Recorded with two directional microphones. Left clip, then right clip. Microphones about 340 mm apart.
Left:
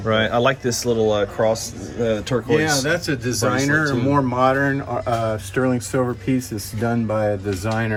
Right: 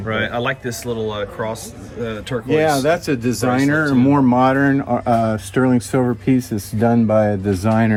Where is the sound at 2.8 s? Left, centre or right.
Centre.